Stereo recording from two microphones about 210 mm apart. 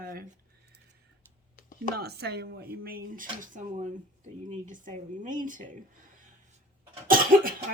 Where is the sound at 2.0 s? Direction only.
50° right (ahead or behind).